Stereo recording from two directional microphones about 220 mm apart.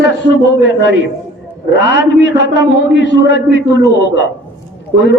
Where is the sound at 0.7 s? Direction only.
50° left (ahead or behind).